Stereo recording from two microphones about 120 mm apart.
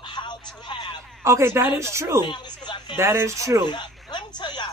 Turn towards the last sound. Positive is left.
turn(degrees=40)  # may be behind; listen again after turning